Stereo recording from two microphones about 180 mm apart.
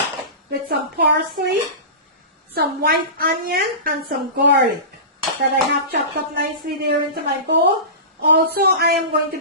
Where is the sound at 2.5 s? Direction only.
60° right (ahead or behind).